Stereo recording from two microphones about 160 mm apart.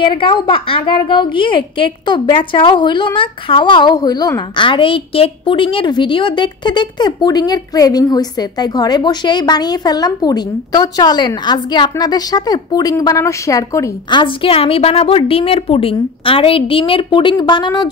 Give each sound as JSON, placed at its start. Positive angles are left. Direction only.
{"t": 0.0, "sound": "a woman's voice", "side_deg": 30}